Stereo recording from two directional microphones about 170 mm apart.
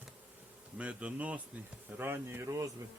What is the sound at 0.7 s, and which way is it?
Speech, 5° right (ahead or behind).